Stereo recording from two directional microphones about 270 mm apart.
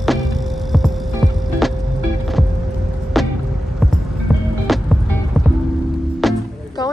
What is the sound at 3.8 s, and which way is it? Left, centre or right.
Music, centre.